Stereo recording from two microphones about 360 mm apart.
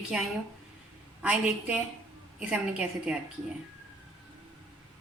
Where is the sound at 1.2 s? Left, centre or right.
Centre.